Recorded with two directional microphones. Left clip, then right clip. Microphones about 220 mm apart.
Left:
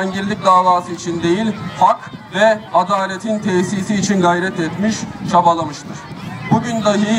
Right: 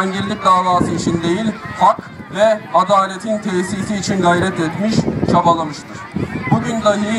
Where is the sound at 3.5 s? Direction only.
35° right (ahead or behind).